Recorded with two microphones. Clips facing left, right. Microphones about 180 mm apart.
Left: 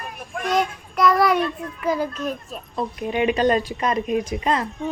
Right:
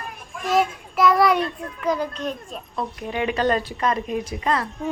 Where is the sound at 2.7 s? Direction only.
20° left (ahead or behind).